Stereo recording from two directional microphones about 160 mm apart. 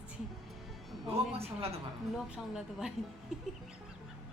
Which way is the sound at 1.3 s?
40° right (ahead or behind).